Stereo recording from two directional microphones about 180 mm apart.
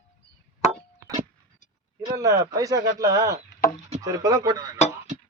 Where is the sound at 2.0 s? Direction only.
20° right (ahead or behind).